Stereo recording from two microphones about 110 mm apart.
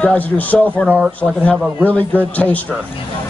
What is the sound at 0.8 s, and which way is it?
Speech, 15° right (ahead or behind).